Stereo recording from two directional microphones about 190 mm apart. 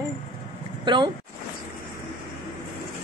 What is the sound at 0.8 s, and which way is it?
Speech, 25° right (ahead or behind).